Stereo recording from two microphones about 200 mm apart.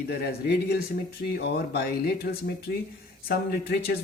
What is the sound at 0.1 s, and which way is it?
Speech, 50° left (ahead or behind).